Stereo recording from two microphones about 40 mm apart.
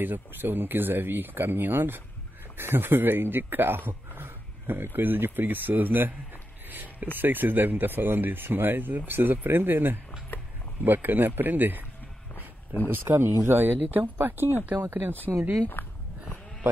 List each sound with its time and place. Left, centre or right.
0.0 s speech: right
6.7 s a sound: right
7.2 s speech: right
12.8 s speech: right
14.8 s speech: right
15.8 s a sound: left